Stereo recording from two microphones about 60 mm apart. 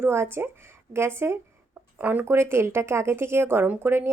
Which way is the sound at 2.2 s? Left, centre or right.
Right.